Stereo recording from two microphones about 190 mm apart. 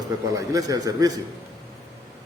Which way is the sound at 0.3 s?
20° right (ahead or behind).